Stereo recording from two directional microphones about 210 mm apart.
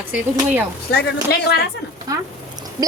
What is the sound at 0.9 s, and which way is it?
Speech, 50° left (ahead or behind).